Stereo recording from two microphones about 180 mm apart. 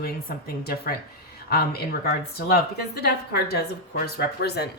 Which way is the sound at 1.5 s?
60° left (ahead or behind).